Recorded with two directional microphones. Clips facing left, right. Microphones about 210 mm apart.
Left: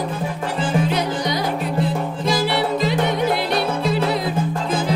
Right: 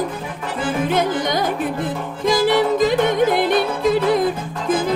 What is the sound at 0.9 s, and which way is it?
Music, 50° right (ahead or behind).